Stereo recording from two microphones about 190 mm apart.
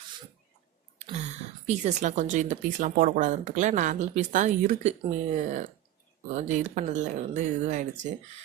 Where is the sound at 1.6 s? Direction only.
35° right (ahead or behind).